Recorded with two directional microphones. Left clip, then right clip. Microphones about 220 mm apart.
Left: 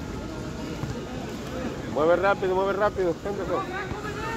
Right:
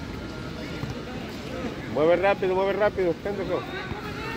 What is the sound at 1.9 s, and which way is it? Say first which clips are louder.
Speech: right 1 dB; 35° right (ahead or behind).